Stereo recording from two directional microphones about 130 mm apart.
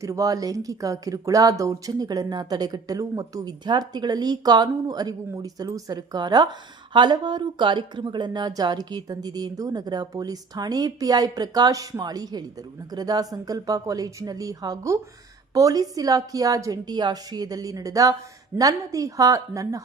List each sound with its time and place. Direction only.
0.0 s speech: 25° right (ahead or behind)